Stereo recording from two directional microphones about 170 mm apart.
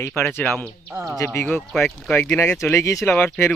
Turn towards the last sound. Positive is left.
turn(degrees=15)  # may be behind; listen again after turning